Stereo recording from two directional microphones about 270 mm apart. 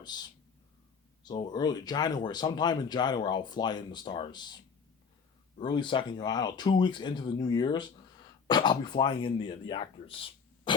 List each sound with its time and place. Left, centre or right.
0.1 s speech: centre
5.5 s speech: centre